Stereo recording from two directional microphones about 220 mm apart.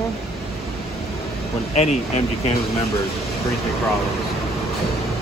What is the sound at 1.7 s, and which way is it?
Speech, 30° left (ahead or behind).